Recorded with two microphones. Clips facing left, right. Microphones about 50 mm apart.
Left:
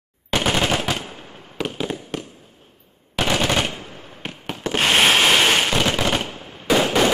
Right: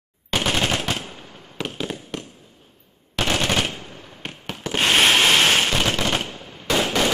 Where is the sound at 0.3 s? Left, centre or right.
Centre.